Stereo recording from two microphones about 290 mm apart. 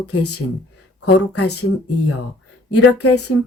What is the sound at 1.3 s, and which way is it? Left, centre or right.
Speech, left.